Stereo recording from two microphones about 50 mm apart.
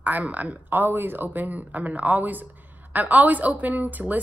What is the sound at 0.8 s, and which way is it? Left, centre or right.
Speech, right.